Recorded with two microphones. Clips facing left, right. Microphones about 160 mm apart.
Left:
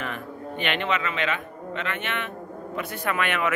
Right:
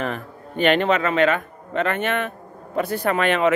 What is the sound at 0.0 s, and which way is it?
A man's voice, 40° right (ahead or behind).